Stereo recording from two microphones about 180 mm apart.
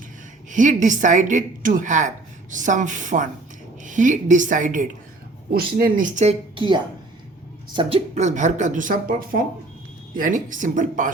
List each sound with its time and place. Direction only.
0.5 s a woman's voice: 45° right (ahead or behind)
6.6 s a woman's voice: 25° right (ahead or behind); by 11.1 s 45° right (ahead or behind)